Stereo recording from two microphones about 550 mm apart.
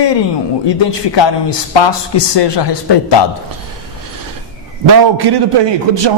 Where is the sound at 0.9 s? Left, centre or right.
Left.